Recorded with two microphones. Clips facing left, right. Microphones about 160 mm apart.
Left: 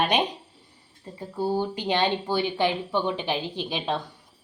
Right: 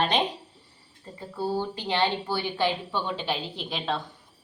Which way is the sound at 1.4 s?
15° left (ahead or behind).